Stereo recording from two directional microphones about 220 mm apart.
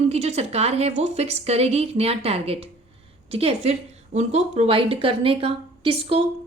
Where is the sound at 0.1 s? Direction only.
30° right (ahead or behind).